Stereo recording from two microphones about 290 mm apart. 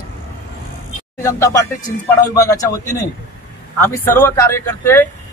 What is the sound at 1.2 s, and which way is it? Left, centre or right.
Speech, centre.